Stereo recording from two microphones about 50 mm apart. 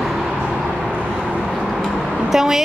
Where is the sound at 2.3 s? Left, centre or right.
Centre.